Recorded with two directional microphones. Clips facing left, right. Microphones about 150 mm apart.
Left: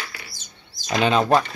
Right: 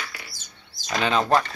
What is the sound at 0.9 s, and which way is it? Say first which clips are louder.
Speech: left 3 dB; 15° left (ahead or behind).